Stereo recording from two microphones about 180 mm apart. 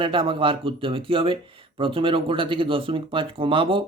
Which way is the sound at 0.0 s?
30° right (ahead or behind).